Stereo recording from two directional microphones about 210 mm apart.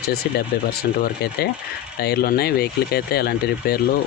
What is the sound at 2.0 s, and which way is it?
Speech, 45° left (ahead or behind).